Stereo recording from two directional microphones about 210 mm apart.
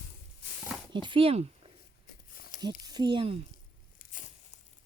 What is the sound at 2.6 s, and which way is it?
Speech, 20° right (ahead or behind).